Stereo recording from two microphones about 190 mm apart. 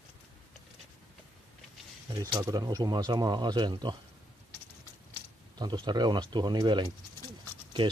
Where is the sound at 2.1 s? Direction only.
20° right (ahead or behind).